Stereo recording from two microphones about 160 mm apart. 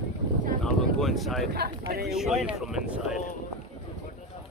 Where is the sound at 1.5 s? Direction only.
80° right.